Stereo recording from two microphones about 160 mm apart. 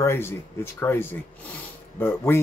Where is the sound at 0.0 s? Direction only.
15° left (ahead or behind).